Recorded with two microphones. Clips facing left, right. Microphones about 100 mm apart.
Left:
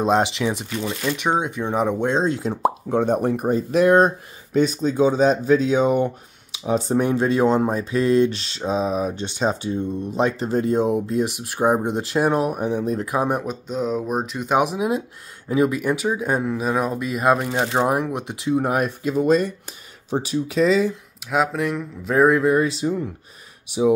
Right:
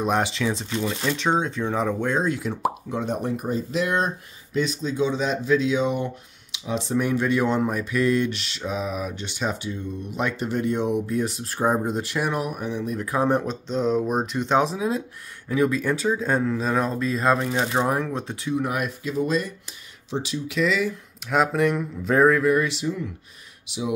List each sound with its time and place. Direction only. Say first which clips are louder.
0.0 s speech: left 4 dB; 20° left (ahead or behind)
2.9 s speech: left 7 dB; 55° left (ahead or behind)
7.0 s speech: left 2 dB; 30° left (ahead or behind)
13.0 s speech: even; 15° left (ahead or behind)
18.6 s speech: left 5 dB; 40° left (ahead or behind)
21.3 s speech: right 1 dB; centre (ahead or behind)
22.2 s speech: left 3 dB; 20° left (ahead or behind)